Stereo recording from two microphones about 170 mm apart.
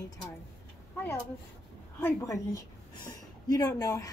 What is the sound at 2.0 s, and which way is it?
A woman's voice, 10° left (ahead or behind).